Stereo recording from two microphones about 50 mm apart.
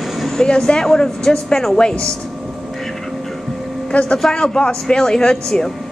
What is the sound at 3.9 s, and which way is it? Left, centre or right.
Speech, left.